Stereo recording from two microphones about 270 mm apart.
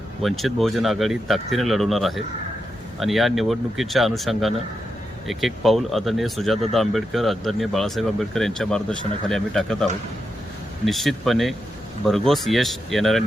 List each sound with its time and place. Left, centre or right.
0.2 s speech: centre
10.8 s speech: centre